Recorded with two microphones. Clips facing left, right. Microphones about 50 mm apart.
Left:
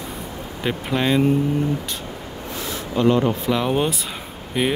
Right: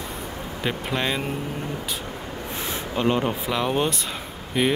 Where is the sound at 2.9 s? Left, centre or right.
Centre.